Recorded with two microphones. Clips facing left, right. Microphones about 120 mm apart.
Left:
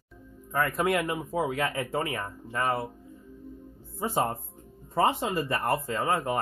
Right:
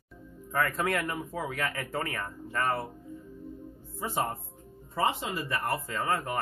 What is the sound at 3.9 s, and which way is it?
Speech, 30° left (ahead or behind).